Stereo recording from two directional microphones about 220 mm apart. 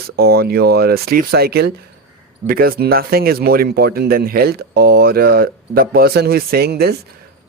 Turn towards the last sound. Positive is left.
turn(degrees=-45)  # may be behind; listen again after turning